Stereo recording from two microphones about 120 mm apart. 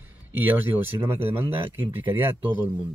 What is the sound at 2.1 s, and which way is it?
Speech, 15° right (ahead or behind).